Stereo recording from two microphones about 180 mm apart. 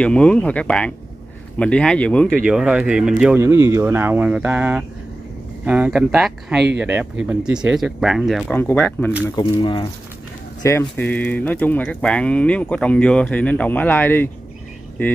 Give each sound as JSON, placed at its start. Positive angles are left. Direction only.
{"t": 0.0, "sound": "speech", "side_deg": 5}
{"t": 9.3, "sound": "speech", "side_deg": 25}
{"t": 10.8, "sound": "speech", "side_deg": 5}